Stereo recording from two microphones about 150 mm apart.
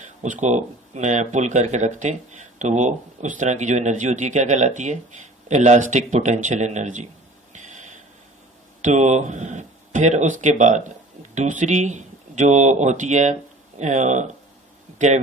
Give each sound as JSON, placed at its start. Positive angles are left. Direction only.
{"t": 0.2, "sound": "speech", "side_deg": -50}
{"t": 7.5, "sound": "a sound", "side_deg": -55}
{"t": 8.8, "sound": "speech", "side_deg": -50}